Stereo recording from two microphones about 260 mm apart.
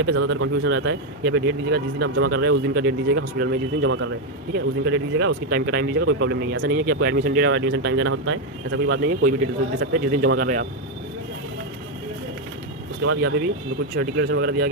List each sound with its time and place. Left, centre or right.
0.0 s speech: right
9.0 s speech: right
13.0 s speech: right